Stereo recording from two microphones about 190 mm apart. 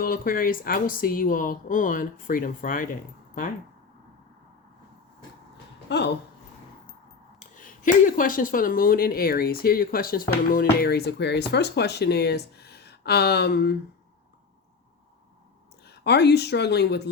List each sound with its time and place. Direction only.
0.0 s speech: 50° left (ahead or behind)
5.9 s speech: 65° left (ahead or behind)
7.3 s speech: 45° left (ahead or behind)
15.8 s a woman's voice: 60° left (ahead or behind)